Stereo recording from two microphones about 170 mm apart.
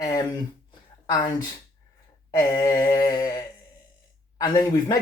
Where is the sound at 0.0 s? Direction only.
20° left (ahead or behind).